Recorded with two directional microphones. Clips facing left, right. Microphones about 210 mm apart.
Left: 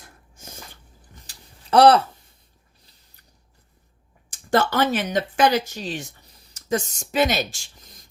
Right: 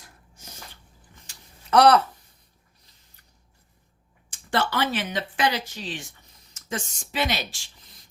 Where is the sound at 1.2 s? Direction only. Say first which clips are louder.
Left 3 dB; 30° left (ahead or behind).